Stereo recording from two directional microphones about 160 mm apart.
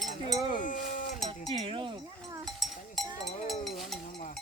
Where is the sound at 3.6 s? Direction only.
Centre (ahead or behind).